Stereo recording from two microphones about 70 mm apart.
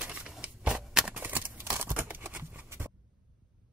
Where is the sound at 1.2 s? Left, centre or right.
Right.